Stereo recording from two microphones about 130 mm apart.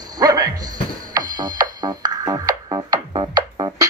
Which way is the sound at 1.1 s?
35° right (ahead or behind).